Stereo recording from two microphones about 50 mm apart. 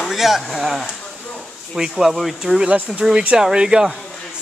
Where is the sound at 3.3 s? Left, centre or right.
Centre.